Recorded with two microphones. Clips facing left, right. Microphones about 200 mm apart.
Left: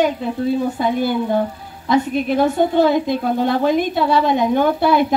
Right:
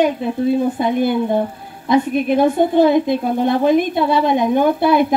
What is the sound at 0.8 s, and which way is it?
A woman's voice, 20° right (ahead or behind).